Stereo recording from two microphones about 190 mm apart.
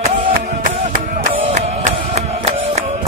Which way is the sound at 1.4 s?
30° right (ahead or behind).